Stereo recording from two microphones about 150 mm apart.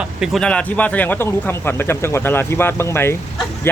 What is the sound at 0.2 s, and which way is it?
Speech, 5° left (ahead or behind).